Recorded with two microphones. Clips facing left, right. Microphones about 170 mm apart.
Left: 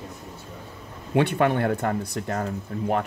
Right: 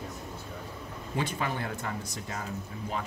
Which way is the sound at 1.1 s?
65° left (ahead or behind).